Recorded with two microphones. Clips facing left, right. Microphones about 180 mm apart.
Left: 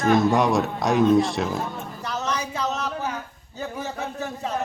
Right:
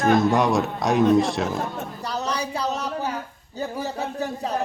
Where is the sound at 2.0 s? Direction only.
35° right (ahead or behind).